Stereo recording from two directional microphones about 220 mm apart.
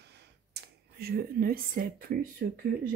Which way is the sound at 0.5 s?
45° right (ahead or behind).